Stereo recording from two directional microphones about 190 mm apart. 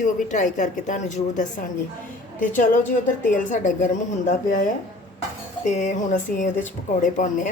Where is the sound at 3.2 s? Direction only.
40° left (ahead or behind).